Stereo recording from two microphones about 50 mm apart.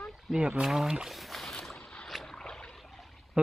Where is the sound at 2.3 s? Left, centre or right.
Centre.